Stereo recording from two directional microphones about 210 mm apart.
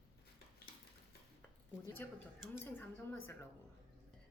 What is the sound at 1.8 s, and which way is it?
Speech, 10° left (ahead or behind).